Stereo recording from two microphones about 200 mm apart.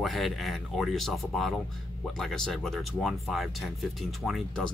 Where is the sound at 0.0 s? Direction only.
Centre (ahead or behind).